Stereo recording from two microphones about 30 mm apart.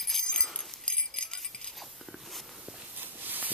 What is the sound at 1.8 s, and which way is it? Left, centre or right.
Biting, centre.